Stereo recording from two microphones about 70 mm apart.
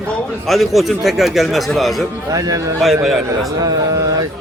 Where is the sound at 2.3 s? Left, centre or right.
Right.